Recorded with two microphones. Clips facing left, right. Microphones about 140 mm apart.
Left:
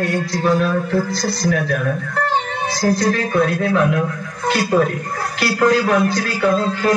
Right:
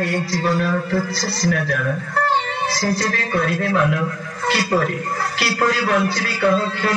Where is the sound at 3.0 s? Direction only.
45° left (ahead or behind).